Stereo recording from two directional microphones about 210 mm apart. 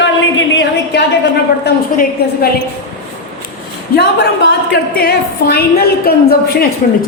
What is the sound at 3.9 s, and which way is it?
A woman's voice, 55° left (ahead or behind).